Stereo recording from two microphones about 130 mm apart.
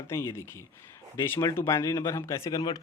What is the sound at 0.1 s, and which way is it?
Speech, 20° left (ahead or behind).